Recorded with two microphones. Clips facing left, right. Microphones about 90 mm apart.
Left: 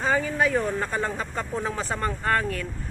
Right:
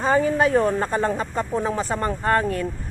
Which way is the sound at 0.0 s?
25° right (ahead or behind).